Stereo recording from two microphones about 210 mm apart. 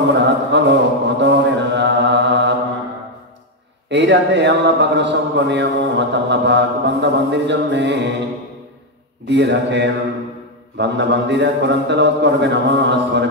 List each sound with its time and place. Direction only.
0.1 s chant: 55° right (ahead or behind)
3.9 s a man's voice: 60° right (ahead or behind)
9.2 s a man's voice: 55° right (ahead or behind)